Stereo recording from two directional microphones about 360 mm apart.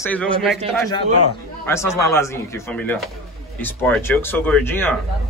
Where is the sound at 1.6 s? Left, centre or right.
Centre.